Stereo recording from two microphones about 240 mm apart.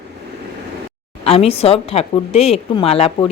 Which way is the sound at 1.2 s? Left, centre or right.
Left.